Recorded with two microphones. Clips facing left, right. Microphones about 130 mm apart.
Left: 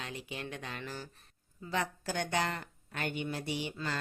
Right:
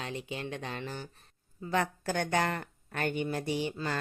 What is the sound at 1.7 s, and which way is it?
Speech, 50° right (ahead or behind).